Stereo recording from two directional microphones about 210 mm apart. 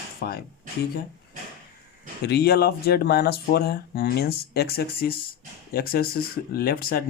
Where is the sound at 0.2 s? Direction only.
50° left (ahead or behind).